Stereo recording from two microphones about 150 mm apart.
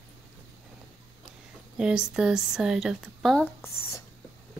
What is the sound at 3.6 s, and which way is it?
Speech, 20° left (ahead or behind).